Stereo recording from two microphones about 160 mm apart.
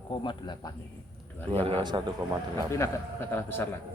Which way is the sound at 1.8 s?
25° right (ahead or behind).